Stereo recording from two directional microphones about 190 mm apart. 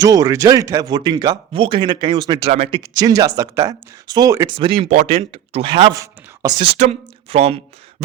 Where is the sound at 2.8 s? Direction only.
20° right (ahead or behind).